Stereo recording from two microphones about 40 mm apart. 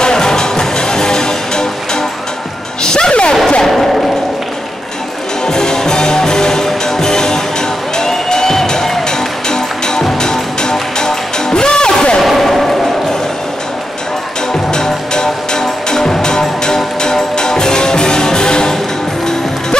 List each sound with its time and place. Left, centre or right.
0.0 s music: centre
3.6 s music: centre
5.4 s music: centre
12.2 s a sound: centre
14.7 s music: centre